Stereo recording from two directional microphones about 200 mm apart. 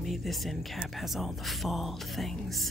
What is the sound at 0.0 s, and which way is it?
Speech, centre (ahead or behind).